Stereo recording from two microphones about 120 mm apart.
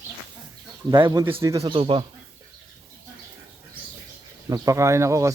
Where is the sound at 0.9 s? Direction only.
35° right (ahead or behind).